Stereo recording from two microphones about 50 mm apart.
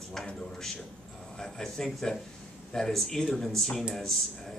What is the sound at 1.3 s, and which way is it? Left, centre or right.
Speech, centre.